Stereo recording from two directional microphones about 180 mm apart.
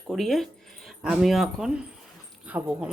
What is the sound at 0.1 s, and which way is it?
A woman's voice, centre (ahead or behind).